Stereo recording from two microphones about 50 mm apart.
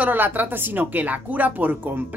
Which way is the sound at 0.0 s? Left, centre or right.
Right.